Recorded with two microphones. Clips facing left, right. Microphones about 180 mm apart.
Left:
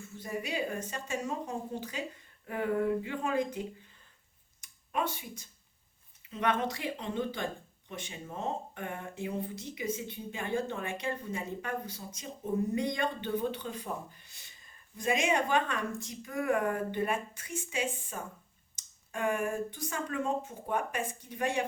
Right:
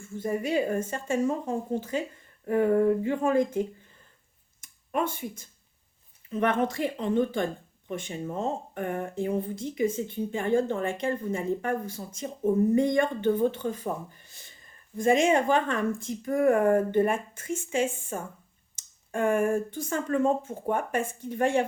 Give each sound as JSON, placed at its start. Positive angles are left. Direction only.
{"t": 0.0, "sound": "speech", "side_deg": -50}
{"t": 4.6, "sound": "a sound", "side_deg": -50}
{"t": 6.6, "sound": "speech", "side_deg": -50}